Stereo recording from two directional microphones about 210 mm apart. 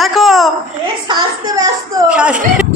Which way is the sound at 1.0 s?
20° right (ahead or behind).